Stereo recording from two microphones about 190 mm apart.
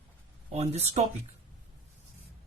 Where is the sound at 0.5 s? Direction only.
35° right (ahead or behind).